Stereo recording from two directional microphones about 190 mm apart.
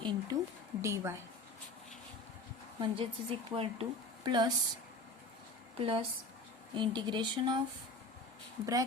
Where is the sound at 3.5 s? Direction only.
30° right (ahead or behind).